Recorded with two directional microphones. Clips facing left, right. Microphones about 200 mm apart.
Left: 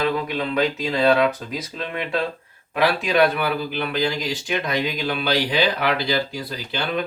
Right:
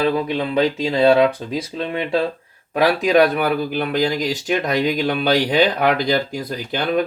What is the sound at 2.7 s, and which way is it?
Speech, 40° right (ahead or behind).